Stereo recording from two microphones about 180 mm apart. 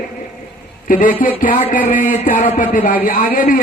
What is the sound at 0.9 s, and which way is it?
A man's voice, 50° left (ahead or behind).